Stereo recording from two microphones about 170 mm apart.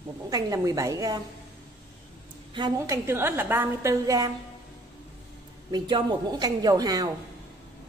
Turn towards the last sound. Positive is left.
turn(degrees=-20)  # may be behind; listen again after turning